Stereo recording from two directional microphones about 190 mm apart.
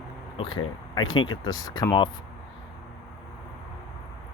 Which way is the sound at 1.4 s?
20° left (ahead or behind).